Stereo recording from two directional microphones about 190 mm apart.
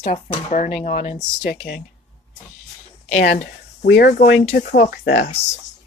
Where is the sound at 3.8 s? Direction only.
60° left (ahead or behind).